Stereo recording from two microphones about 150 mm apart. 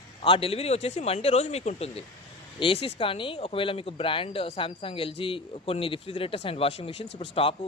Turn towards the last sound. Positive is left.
turn(degrees=35)  # may be behind; listen again after turning